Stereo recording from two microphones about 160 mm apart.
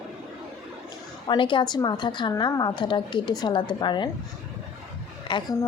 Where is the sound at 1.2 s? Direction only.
30° left (ahead or behind).